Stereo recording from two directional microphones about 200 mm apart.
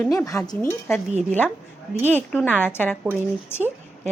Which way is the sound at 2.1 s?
10° left (ahead or behind).